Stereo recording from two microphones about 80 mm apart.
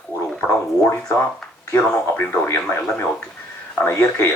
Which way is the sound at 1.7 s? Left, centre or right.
Left.